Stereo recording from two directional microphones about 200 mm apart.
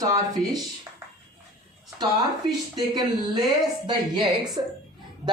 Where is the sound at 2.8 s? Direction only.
20° right (ahead or behind).